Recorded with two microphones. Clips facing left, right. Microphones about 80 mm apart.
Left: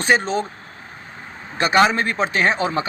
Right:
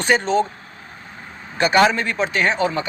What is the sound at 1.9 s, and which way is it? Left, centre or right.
Speech, left.